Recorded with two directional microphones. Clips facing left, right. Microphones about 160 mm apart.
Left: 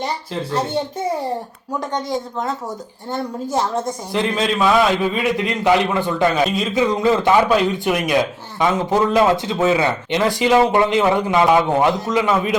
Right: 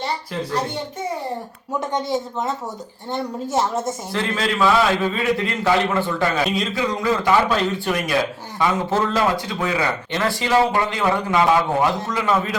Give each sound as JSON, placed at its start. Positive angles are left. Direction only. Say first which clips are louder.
{"t": 2.0, "sound": "a woman's voice", "louder": "even", "side_deg": 0}
{"t": 4.1, "sound": "a man's voice", "louder": "left 4 dB", "side_deg": 20}